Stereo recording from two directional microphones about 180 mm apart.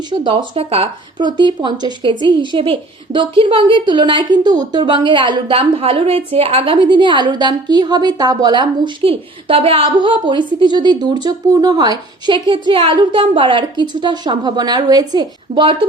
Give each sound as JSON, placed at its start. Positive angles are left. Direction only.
{"t": 0.1, "sound": "a woman's voice", "side_deg": -25}